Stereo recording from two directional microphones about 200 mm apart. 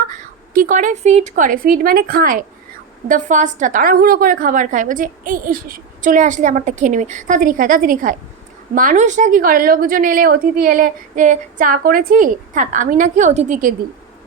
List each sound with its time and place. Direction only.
0.1 s a woman's voice: 40° right (ahead or behind)